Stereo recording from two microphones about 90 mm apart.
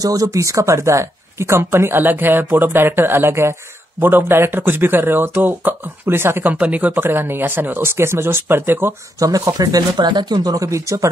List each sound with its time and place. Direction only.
0.0 s speech: 40° right (ahead or behind); by 8.9 s 25° right (ahead or behind)
9.2 s speech: 40° right (ahead or behind)